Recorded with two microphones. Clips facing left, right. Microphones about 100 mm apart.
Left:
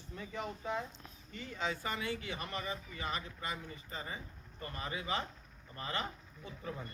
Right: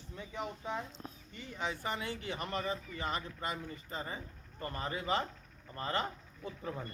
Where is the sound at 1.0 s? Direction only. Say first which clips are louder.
Right 7 dB; 35° right (ahead or behind).